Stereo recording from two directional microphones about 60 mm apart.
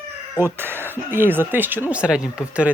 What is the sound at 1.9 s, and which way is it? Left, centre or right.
Speech, centre.